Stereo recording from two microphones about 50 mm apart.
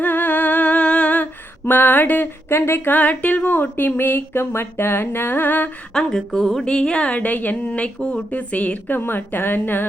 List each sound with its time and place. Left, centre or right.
0.0 s humming: left
1.6 s speech: left
2.5 s a woman's voice: left
2.9 s speech: left
5.9 s speech: centre
6.7 s a woman's voice: centre
7.2 s a woman's voice: left
8.9 s a woman's voice: left